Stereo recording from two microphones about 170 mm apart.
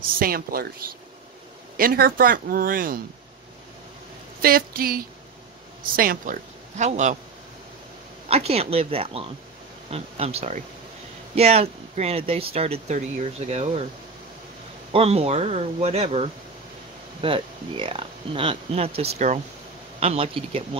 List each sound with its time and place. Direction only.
0.2 s speech: 60° right (ahead or behind)
4.4 s speech: 60° right (ahead or behind)
6.8 s a man's voice: 45° right (ahead or behind)
8.3 s speech: 35° right (ahead or behind)
14.9 s a man's voice: 35° right (ahead or behind)